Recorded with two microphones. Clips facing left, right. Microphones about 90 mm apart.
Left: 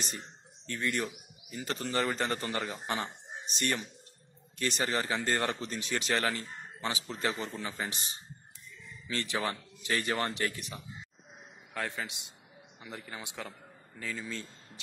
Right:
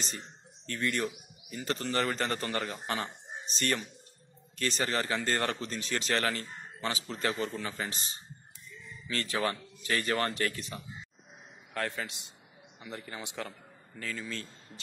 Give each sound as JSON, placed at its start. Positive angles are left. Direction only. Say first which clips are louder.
{"t": 0.0, "sound": "a man's voice", "louder": "even", "side_deg": 10}
{"t": 9.0, "sound": "a man's voice", "louder": "right 2 dB", "side_deg": 20}